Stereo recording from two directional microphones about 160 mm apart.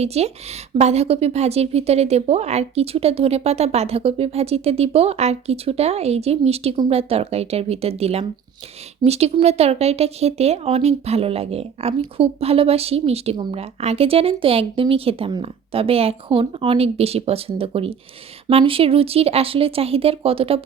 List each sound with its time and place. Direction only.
0.0 s speech: 40° right (ahead or behind)